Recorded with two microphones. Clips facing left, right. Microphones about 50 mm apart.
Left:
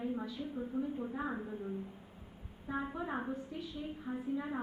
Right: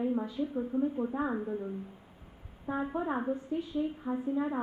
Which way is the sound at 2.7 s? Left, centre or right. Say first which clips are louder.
Right 6 dB; right.